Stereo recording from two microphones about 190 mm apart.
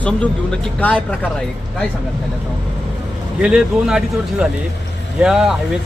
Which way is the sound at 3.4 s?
5° right (ahead or behind).